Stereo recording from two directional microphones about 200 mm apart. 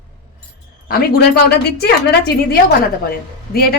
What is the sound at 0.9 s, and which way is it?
A woman's voice, 50° left (ahead or behind).